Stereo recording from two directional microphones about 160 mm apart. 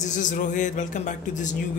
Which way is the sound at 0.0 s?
50° left (ahead or behind).